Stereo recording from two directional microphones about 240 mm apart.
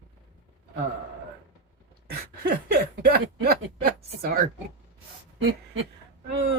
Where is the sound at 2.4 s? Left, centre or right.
Right.